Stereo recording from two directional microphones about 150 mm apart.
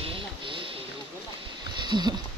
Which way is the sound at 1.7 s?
30° right (ahead or behind).